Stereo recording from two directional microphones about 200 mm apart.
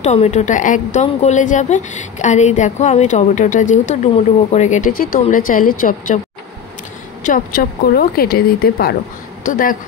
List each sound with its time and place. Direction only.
0.0 s a woman's voice: 35° left (ahead or behind)
7.2 s speech: 45° left (ahead or behind)